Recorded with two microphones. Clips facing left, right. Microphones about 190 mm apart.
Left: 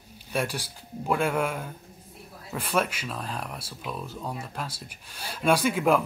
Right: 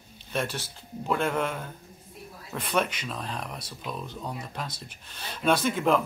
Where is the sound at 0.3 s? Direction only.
10° left (ahead or behind).